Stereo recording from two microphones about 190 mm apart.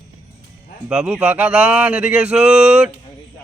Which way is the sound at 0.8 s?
5° right (ahead or behind).